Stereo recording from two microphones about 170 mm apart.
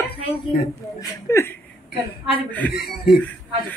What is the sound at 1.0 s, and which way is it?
Chuckle, 15° left (ahead or behind).